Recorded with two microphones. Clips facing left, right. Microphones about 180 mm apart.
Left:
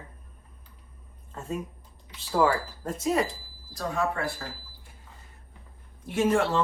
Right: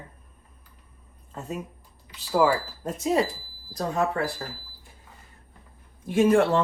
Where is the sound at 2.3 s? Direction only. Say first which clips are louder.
Right 2 dB; 15° right (ahead or behind).